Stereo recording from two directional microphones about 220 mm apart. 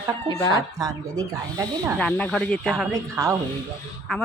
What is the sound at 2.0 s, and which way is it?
Speech, 5° left (ahead or behind).